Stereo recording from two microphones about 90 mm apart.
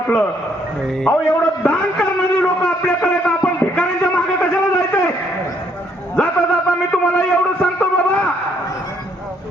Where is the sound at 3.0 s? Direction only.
10° left (ahead or behind).